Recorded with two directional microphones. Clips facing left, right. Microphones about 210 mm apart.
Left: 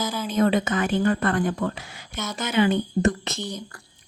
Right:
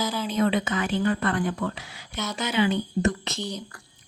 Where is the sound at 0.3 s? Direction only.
45° left (ahead or behind).